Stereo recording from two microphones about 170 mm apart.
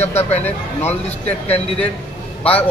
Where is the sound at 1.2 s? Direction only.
35° left (ahead or behind).